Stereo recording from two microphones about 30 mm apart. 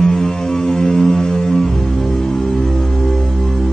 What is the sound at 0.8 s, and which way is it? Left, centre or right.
Music, left.